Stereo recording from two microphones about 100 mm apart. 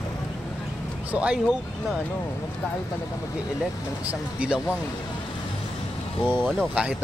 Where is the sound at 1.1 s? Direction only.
10° right (ahead or behind).